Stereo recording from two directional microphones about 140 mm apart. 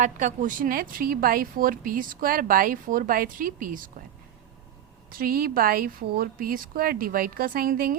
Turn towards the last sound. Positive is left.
turn(degrees=-85)